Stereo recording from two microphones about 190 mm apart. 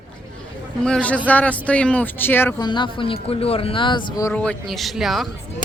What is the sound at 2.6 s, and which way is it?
Speech, 25° left (ahead or behind).